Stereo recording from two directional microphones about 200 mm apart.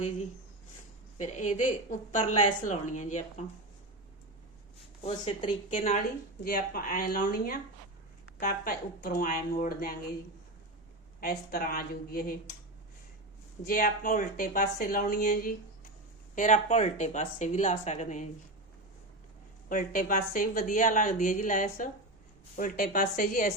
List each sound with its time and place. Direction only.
1.2 s speech: 35° left (ahead or behind)
5.0 s speech: 30° left (ahead or behind)
6.4 s speech: 50° left (ahead or behind)
11.2 s speech: 45° left (ahead or behind)
13.7 s speech: 45° left (ahead or behind)
19.6 s speech: 40° left (ahead or behind)